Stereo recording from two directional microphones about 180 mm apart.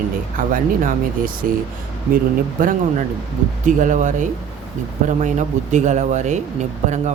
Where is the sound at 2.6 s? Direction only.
50° right (ahead or behind).